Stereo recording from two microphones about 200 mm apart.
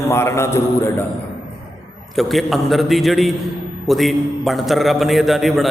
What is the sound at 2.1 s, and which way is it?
A man's voice, centre (ahead or behind).